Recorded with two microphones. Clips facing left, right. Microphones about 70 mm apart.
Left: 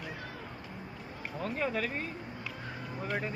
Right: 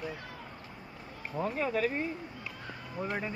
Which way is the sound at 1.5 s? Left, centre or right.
Centre.